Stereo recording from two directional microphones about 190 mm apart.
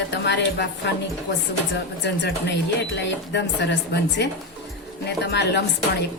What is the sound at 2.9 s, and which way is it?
Speech, 65° left (ahead or behind).